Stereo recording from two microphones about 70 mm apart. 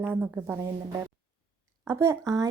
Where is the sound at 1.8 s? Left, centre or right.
Right.